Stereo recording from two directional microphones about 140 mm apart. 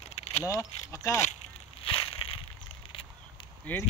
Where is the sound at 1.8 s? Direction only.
40° left (ahead or behind).